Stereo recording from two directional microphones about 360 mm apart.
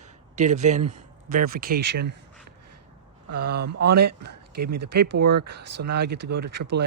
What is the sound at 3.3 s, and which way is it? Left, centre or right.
Speech, right.